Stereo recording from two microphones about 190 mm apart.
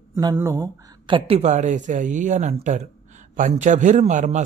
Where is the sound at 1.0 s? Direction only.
25° right (ahead or behind).